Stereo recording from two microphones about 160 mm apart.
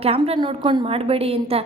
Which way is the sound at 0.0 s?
40° right (ahead or behind).